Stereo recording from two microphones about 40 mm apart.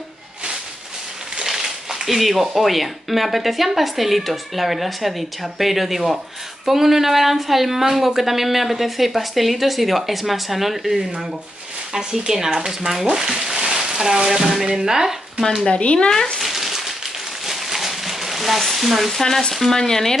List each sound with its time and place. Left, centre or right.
1.3 s a sound: centre
2.5 s a woman's voice: centre
15.7 s speech: left
16.1 s speech: centre
16.3 s a sound: centre
17.5 s frying: centre
19.5 s speech: centre